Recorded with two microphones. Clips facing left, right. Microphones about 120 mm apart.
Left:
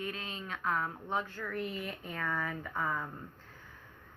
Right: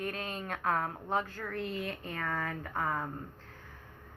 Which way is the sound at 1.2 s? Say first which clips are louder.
Right 1 dB; 35° right (ahead or behind).